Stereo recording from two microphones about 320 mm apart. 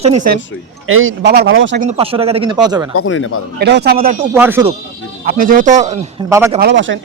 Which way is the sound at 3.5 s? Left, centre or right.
Right.